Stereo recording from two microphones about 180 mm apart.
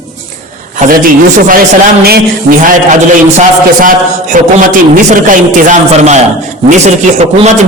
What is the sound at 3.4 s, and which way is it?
A man's voice, 45° right (ahead or behind).